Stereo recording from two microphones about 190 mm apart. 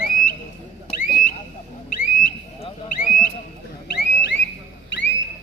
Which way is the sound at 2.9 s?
45° left (ahead or behind).